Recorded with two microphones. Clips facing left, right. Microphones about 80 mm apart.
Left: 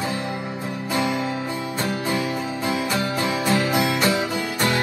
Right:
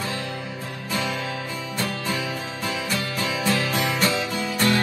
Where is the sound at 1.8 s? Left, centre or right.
Left.